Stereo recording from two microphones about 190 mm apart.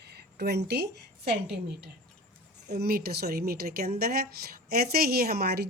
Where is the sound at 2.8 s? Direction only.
55° right (ahead or behind).